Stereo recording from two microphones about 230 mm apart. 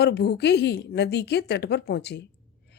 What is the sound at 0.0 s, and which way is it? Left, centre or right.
Speech, left.